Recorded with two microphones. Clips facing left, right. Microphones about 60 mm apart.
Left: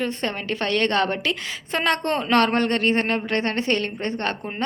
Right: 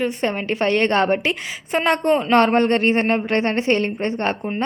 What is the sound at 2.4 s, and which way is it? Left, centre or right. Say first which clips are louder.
A woman's voice: right 4 dB; right.